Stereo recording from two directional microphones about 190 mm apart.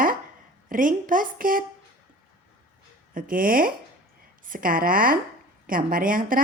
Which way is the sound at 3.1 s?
45° right (ahead or behind).